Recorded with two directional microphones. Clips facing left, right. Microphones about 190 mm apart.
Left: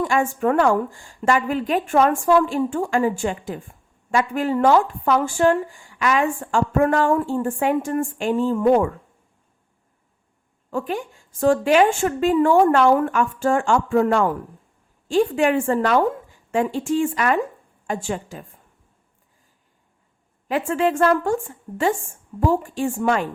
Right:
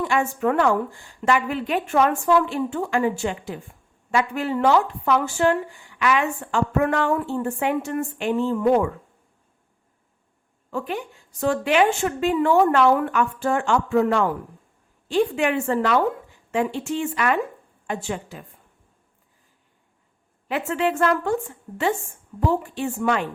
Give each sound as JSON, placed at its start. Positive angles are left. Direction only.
{"t": 0.0, "sound": "a woman's voice", "side_deg": 45}
{"t": 10.7, "sound": "a woman's voice", "side_deg": 45}
{"t": 20.5, "sound": "a woman's voice", "side_deg": 40}